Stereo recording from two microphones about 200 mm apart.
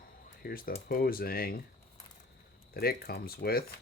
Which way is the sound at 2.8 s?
50° left (ahead or behind).